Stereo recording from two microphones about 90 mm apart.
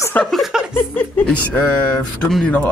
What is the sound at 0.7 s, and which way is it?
Speech, 25° left (ahead or behind).